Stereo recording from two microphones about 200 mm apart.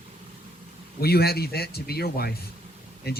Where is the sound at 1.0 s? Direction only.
50° left (ahead or behind).